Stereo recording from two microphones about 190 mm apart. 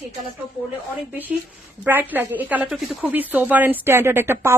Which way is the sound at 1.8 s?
10° right (ahead or behind).